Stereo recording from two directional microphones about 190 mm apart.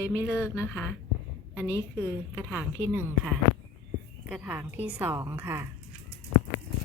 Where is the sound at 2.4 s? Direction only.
5° right (ahead or behind).